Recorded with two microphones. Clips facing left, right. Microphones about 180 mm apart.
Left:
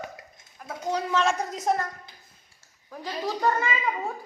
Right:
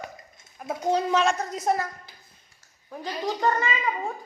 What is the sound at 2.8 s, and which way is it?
Speech, 15° right (ahead or behind).